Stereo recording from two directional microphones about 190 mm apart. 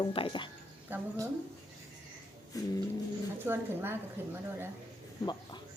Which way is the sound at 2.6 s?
20° left (ahead or behind).